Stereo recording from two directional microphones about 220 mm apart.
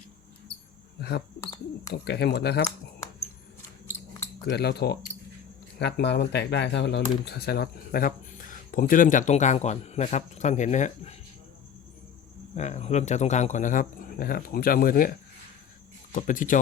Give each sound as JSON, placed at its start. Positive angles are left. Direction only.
{"t": 1.9, "sound": "speech", "side_deg": 50}
{"t": 4.4, "sound": "speech", "side_deg": 45}
{"t": 12.5, "sound": "speech", "side_deg": 30}
{"t": 16.1, "sound": "speech", "side_deg": 35}